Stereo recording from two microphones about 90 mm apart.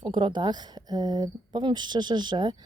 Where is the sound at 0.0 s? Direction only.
60° right (ahead or behind).